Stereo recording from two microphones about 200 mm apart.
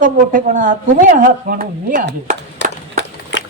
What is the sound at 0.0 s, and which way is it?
A woman's voice, 40° right (ahead or behind).